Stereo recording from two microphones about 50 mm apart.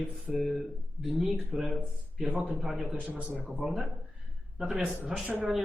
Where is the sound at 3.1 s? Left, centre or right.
Right.